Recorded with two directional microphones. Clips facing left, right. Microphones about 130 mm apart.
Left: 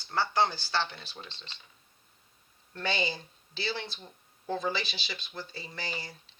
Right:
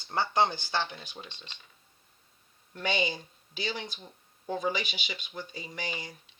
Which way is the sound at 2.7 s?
15° right (ahead or behind).